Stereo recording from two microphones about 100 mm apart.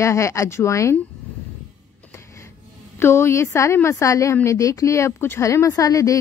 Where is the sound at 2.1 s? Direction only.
30° left (ahead or behind).